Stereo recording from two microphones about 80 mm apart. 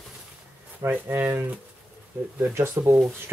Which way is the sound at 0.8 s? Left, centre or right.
Right.